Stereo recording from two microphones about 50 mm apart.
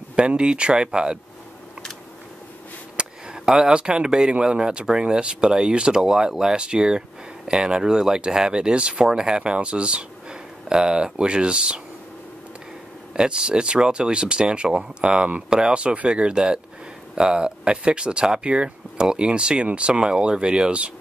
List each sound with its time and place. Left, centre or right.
0.1 s speech: right
3.0 s speech: centre
13.1 s speech: centre